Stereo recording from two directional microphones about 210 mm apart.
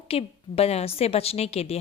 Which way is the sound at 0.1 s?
30° left (ahead or behind).